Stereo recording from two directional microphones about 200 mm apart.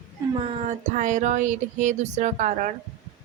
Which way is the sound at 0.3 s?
30° right (ahead or behind).